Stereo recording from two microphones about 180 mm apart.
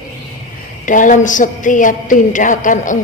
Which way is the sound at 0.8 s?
45° left (ahead or behind).